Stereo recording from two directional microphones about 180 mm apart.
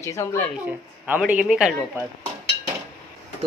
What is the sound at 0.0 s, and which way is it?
Speech, 15° left (ahead or behind).